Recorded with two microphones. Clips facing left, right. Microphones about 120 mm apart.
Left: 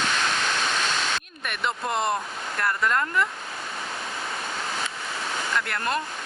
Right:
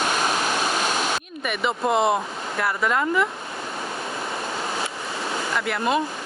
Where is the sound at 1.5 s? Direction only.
5° right (ahead or behind).